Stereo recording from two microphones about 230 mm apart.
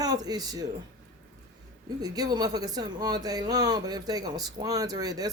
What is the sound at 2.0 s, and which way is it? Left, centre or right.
A man's voice, centre.